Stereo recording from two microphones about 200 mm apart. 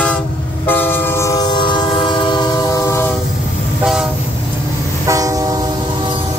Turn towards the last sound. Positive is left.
turn(degrees=-20)  # may be behind; listen again after turning